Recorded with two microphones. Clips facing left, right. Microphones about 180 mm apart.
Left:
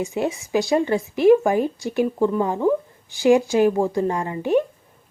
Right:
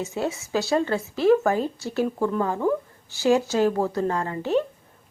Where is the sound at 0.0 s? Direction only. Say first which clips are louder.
Left 4 dB; 15° left (ahead or behind).